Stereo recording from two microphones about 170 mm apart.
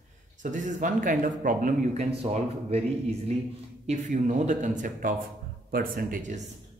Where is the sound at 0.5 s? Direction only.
50° right (ahead or behind).